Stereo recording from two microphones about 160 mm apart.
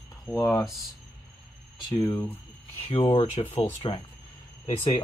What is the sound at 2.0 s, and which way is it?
Speech, 15° left (ahead or behind).